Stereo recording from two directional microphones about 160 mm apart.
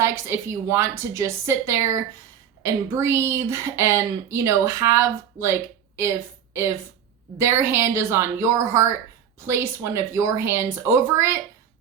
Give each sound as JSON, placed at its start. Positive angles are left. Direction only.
{"t": 0.0, "sound": "a woman's voice", "side_deg": -15}